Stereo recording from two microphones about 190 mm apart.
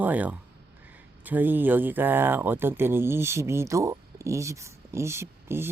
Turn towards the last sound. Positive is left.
turn(degrees=-10)  # may be behind; listen again after turning